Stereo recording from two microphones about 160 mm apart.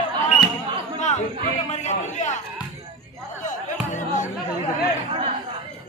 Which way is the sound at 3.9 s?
50° left (ahead or behind).